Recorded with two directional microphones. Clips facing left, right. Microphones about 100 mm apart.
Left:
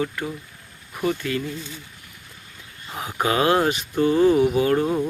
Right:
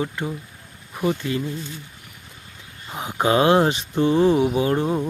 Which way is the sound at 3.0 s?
25° right (ahead or behind).